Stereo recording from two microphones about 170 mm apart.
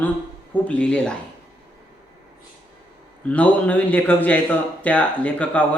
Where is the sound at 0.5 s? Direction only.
5° left (ahead or behind).